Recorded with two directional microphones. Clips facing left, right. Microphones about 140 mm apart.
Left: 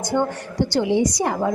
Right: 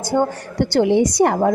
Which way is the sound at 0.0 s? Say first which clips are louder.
Right 3 dB; 35° right (ahead or behind).